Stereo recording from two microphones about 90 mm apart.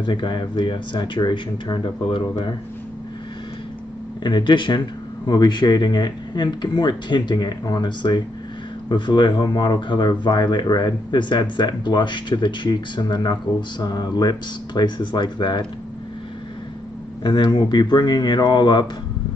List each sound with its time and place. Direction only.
0.0 s speech: 60° left (ahead or behind)
4.2 s speech: 60° left (ahead or behind)
17.2 s speech: 55° left (ahead or behind)